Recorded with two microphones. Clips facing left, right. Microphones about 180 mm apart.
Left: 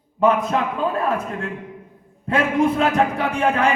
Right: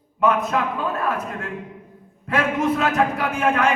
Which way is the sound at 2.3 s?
30° left (ahead or behind).